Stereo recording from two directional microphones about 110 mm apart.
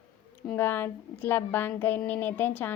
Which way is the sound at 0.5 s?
20° left (ahead or behind).